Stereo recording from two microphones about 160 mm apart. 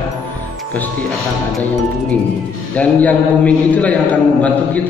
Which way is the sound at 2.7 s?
10° left (ahead or behind).